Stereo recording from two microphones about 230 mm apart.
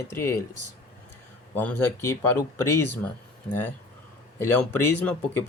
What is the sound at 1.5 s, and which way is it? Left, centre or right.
Speech, centre.